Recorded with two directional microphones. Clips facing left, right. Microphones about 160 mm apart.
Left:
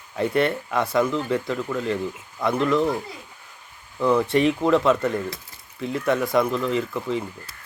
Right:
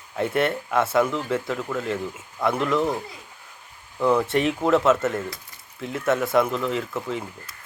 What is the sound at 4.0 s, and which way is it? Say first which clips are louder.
Speech: left 1 dB; 10° right (ahead or behind).